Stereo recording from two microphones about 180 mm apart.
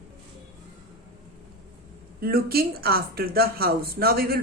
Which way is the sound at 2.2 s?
55° right (ahead or behind).